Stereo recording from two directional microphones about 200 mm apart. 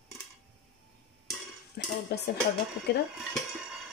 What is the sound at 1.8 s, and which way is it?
Dishes, 55° left (ahead or behind).